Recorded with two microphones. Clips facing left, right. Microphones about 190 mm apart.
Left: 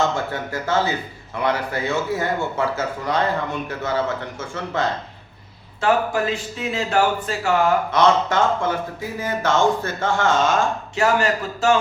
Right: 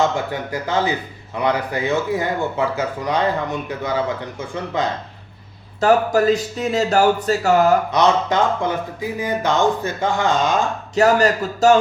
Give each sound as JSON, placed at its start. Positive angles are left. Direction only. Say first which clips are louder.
{"t": 0.0, "sound": "speech", "louder": "right 2 dB", "side_deg": -15}
{"t": 5.8, "sound": "speech", "louder": "right 5 dB", "side_deg": -40}
{"t": 7.9, "sound": "speech", "louder": "right 1 dB", "side_deg": -15}
{"t": 10.9, "sound": "speech", "louder": "right 5 dB", "side_deg": -40}